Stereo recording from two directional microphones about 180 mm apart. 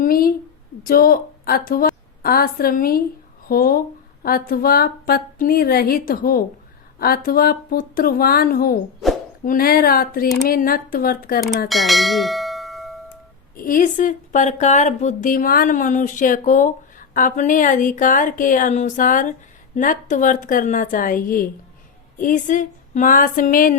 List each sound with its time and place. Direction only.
0.0 s a woman's voice: 55° left (ahead or behind)
11.7 s bell: centre (ahead or behind)
13.6 s speech: 50° left (ahead or behind)